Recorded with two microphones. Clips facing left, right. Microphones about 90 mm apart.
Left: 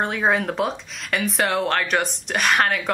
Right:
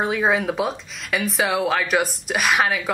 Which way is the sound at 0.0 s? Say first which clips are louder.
Right 1 dB; centre (ahead or behind).